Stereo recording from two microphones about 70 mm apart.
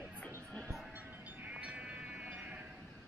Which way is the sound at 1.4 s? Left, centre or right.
Centre.